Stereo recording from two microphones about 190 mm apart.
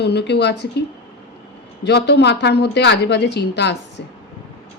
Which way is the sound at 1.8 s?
60° left (ahead or behind).